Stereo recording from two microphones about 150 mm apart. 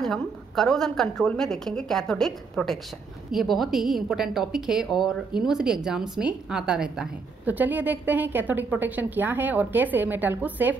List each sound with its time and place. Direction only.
0.0 s a woman's voice: 5° left (ahead or behind)